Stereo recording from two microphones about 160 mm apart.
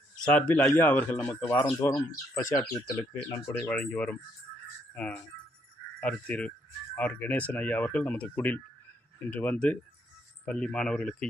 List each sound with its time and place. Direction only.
0.2 s speech: 10° left (ahead or behind)